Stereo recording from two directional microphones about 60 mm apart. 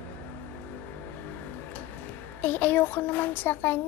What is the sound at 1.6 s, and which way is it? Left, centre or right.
A woman's voice, left.